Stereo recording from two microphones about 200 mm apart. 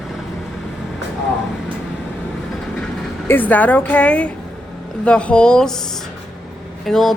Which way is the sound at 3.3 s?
10° left (ahead or behind).